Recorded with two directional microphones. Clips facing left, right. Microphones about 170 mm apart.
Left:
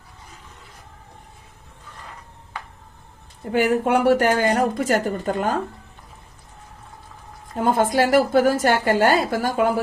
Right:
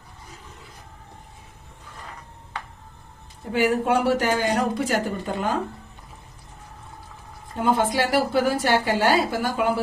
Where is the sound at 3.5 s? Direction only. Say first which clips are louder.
Left 2 dB; 55° left (ahead or behind).